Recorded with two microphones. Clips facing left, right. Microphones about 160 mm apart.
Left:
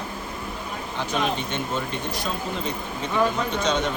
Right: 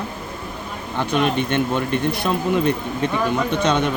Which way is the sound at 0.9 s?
60° right (ahead or behind).